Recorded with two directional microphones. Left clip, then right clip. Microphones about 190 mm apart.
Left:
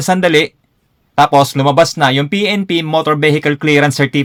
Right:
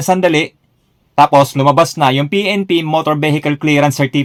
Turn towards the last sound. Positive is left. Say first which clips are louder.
# left 1 dB
turn(degrees=20)  # may be behind; listen again after turning